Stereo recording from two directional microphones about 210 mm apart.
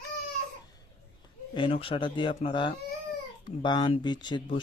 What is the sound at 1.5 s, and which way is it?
Speech, 25° left (ahead or behind).